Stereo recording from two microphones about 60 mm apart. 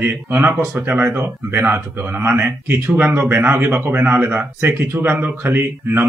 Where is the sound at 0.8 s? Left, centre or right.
Right.